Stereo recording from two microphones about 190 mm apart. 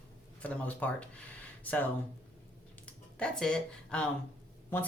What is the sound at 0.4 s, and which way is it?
A woman's voice, 5° left (ahead or behind).